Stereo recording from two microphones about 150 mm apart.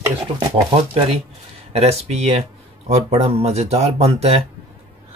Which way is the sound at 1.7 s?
45° right (ahead or behind).